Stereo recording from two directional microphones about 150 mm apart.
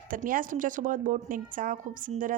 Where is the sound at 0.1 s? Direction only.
65° right (ahead or behind).